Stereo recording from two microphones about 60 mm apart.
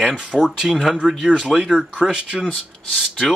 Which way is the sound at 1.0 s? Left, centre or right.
Centre.